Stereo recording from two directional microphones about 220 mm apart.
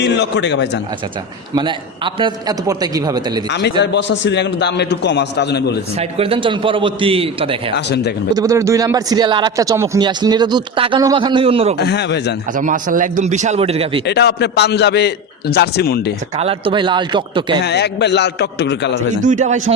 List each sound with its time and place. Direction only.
0.0 s a man's voice: 50° left (ahead or behind)
1.5 s a man's voice: 20° right (ahead or behind)
3.5 s a man's voice: 50° left (ahead or behind)
6.0 s speech: 25° right (ahead or behind)
11.8 s a man's voice: 50° left (ahead or behind)
12.5 s a man's voice: 35° right (ahead or behind)
14.1 s a man's voice: 50° left (ahead or behind)
16.4 s speech: 25° right (ahead or behind)
17.6 s a man's voice: 50° left (ahead or behind)
19.2 s a man's voice: 35° right (ahead or behind)